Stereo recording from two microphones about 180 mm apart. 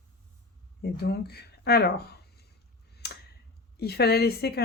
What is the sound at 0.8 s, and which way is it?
Speech, 60° left (ahead or behind).